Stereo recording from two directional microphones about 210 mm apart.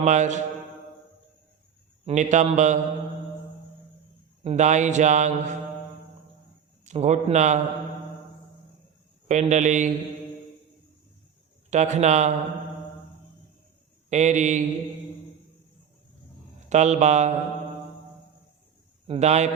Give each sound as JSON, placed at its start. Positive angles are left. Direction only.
{"t": 0.0, "sound": "speech", "side_deg": -35}
{"t": 2.0, "sound": "speech", "side_deg": -35}
{"t": 4.4, "sound": "speech", "side_deg": -35}
{"t": 6.8, "sound": "speech", "side_deg": -35}
{"t": 9.2, "sound": "speech", "side_deg": -35}
{"t": 11.7, "sound": "speech", "side_deg": -35}
{"t": 14.1, "sound": "speech", "side_deg": -35}
{"t": 16.6, "sound": "speech", "side_deg": -35}
{"t": 19.0, "sound": "a man's voice", "side_deg": -30}